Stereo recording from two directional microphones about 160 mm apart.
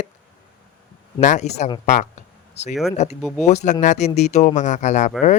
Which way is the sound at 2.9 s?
45° left (ahead or behind).